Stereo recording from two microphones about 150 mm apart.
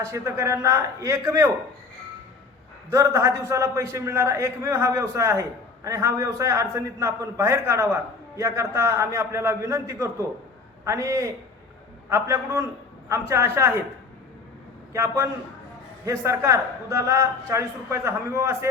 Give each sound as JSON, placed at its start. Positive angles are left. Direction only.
{"t": 0.0, "sound": "a man's voice", "side_deg": -20}
{"t": 2.9, "sound": "a man's voice", "side_deg": -20}
{"t": 14.9, "sound": "a man's voice", "side_deg": -20}